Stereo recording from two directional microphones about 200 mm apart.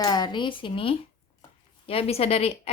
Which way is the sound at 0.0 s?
20° left (ahead or behind).